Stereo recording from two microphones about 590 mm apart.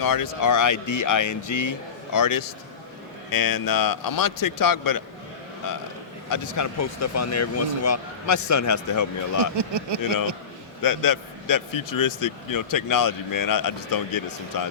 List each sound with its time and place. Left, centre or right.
0.0 s a man's voice: left
9.6 s speech: right
10.8 s a man's voice: left